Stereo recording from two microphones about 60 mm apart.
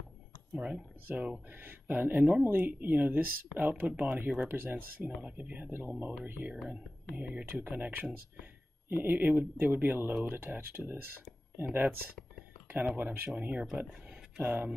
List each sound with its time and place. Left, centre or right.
1.1 s speech: right
6.4 s speech: centre
6.7 s speech: right